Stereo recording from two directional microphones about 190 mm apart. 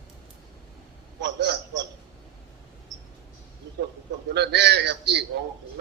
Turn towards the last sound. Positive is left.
turn(degrees=-65)  # may be behind; listen again after turning